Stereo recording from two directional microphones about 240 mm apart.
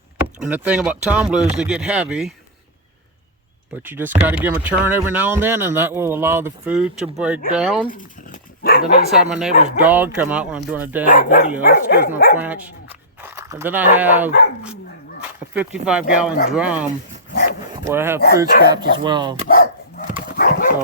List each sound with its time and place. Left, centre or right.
0.3 s speech: centre
3.8 s speech: centre
7.9 s dog: left
9.1 s speech: centre
11.0 s dog: left
12.4 s speech: centre
17.8 s speech: centre
19.5 s dog: left